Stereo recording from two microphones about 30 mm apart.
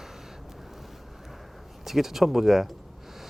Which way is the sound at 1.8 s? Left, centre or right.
Centre.